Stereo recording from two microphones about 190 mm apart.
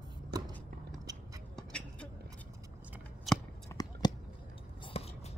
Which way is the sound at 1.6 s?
5° left (ahead or behind).